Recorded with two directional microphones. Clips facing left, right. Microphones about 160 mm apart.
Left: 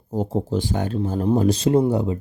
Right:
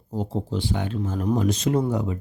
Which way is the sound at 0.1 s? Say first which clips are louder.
Left 5 dB; 45° left (ahead or behind).